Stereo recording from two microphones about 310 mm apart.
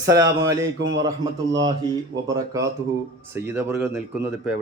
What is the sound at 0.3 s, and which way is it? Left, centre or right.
Speech, centre.